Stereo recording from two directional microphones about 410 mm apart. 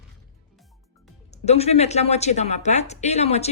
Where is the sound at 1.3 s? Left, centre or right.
Centre.